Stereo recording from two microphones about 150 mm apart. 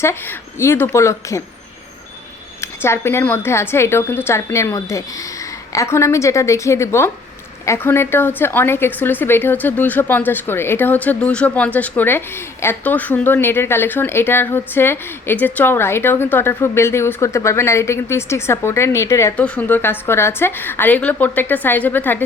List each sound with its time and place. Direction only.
0.0 s a woman's voice: 15° left (ahead or behind)
2.6 s a woman's voice: 15° left (ahead or behind)